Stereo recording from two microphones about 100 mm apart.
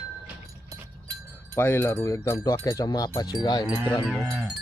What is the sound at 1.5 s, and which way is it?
Speech, 25° left (ahead or behind).